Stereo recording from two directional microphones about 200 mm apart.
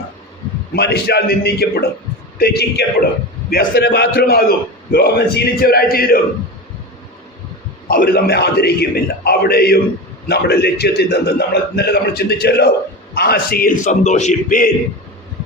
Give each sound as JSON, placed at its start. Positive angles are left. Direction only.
{"t": 0.7, "sound": "a man's voice", "side_deg": 55}
{"t": 7.9, "sound": "a man's voice", "side_deg": 50}